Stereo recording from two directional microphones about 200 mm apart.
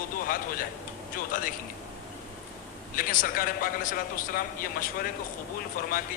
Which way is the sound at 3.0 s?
45° left (ahead or behind).